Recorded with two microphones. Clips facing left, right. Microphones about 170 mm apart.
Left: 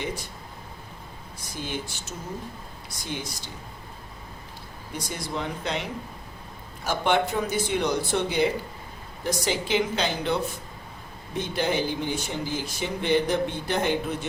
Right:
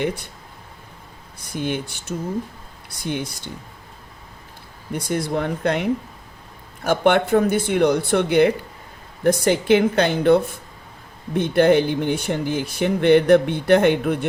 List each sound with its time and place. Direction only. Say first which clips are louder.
1.5 s speech: right 8 dB; 60° right (ahead or behind)
4.9 s speech: right 10 dB; 55° right (ahead or behind)